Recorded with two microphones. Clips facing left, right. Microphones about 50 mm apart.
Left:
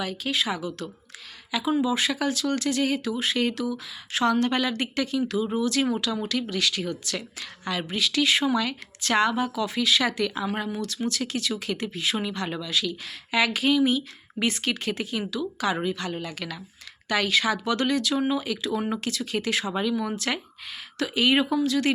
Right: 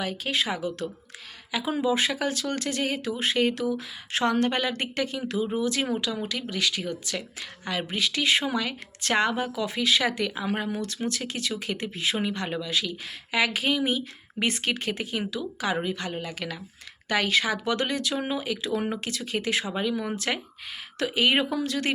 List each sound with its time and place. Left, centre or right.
0.0 s speech: right